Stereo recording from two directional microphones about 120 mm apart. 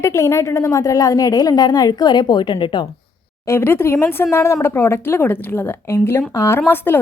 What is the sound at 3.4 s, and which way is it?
A woman's voice, 20° left (ahead or behind).